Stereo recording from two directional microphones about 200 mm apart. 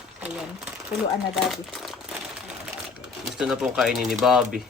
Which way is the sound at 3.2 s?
Centre (ahead or behind).